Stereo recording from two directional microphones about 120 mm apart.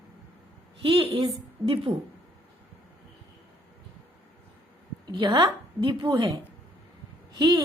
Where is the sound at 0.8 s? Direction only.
45° right (ahead or behind).